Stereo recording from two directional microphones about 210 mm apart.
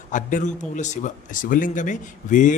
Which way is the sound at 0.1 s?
40° left (ahead or behind).